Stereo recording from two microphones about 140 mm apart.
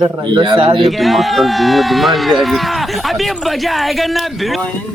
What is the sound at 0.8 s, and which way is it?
Speech, centre (ahead or behind).